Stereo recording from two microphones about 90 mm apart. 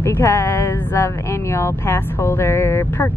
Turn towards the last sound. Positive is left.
turn(degrees=30)  # may be behind; listen again after turning